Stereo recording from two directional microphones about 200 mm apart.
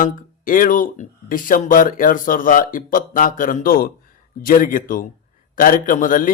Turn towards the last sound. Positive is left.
turn(degrees=40)  # may be behind; listen again after turning